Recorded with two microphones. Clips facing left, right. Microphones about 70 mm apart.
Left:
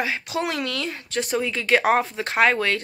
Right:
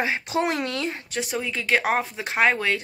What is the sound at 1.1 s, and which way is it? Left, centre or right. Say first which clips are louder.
Speech: left 7 dB; centre.